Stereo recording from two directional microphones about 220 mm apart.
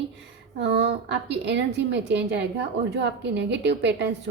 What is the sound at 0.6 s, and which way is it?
A woman's voice, 50° right (ahead or behind).